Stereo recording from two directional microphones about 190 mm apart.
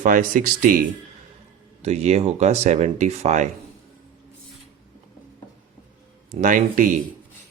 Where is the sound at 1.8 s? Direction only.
35° right (ahead or behind).